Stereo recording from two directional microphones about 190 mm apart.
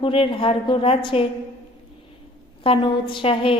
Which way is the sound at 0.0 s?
25° left (ahead or behind).